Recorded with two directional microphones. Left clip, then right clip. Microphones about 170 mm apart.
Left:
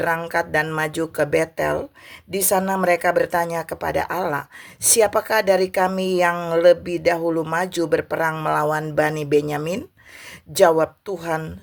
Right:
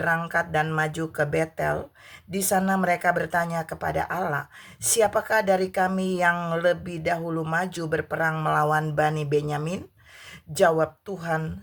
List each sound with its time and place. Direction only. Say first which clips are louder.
0.0 s speech: left 3 dB; 35° left (ahead or behind)
9.0 s speech: left 5 dB; 30° left (ahead or behind)